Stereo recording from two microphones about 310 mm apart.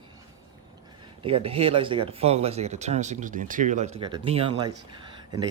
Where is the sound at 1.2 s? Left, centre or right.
Centre.